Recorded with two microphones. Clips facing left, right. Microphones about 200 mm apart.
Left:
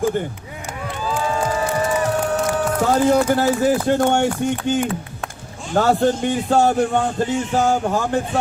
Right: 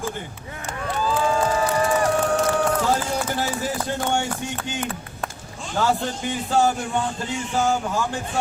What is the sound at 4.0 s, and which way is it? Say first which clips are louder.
Speech: left 7 dB; 55° left (ahead or behind).